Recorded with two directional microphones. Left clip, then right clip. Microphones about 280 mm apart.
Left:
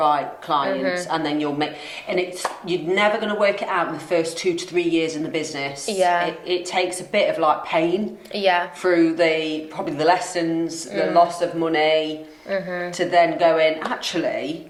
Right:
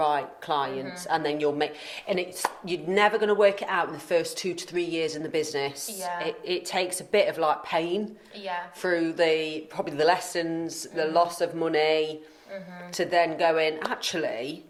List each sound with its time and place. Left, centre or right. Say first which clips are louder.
0.0 s speech: left 6 dB; right
8.4 s a woman's voice: left 14 dB; left
8.8 s speech: left 4 dB; right